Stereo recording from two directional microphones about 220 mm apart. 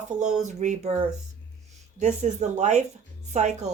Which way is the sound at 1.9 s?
30° right (ahead or behind).